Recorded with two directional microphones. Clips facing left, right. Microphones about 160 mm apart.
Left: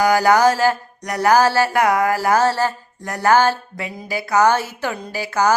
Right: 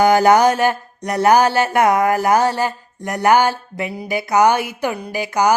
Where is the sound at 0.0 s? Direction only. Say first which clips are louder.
Right 2 dB; 20° right (ahead or behind).